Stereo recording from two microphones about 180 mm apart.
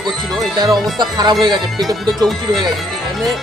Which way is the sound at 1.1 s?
25° right (ahead or behind).